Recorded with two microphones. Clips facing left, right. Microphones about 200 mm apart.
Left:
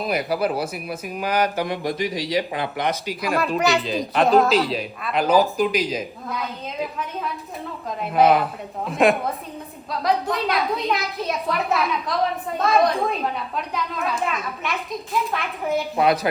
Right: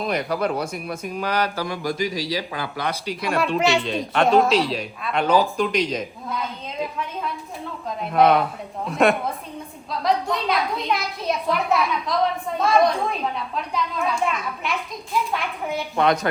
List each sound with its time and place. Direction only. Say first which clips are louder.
0.0 s speech: left 1 dB; 5° left (ahead or behind)
1.6 s speech: left 1 dB; 20° left (ahead or behind)
3.1 s a woman's voice: even; centre (ahead or behind)
7.9 s a woman's voice: even; centre (ahead or behind)